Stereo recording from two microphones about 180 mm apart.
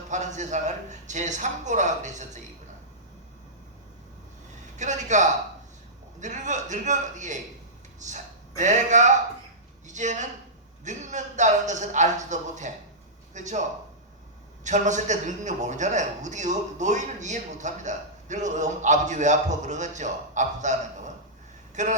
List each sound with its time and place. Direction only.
0.1 s a man's voice: 40° right (ahead or behind)
4.8 s a man's voice: 40° right (ahead or behind)
14.6 s a man's voice: 40° right (ahead or behind)
21.8 s a man's voice: 40° right (ahead or behind)